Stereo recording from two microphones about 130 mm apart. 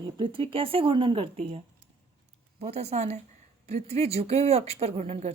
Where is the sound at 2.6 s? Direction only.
55° right (ahead or behind).